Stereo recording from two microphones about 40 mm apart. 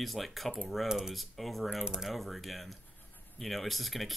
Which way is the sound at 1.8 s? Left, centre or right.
Centre.